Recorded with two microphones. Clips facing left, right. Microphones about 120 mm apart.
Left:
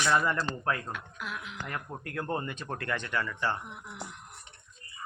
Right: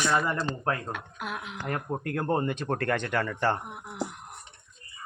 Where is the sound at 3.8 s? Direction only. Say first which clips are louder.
Right 8 dB; 60° right (ahead or behind).